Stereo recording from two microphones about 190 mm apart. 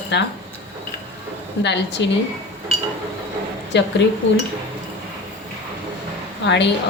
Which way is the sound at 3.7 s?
65° left (ahead or behind).